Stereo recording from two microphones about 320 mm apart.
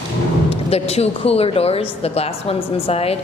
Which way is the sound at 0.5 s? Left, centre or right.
Centre.